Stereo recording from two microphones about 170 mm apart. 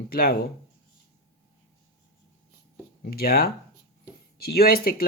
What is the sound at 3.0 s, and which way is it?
Speech, 65° left (ahead or behind).